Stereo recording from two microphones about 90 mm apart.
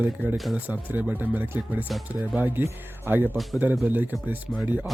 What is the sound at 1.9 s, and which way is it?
Speech, centre (ahead or behind).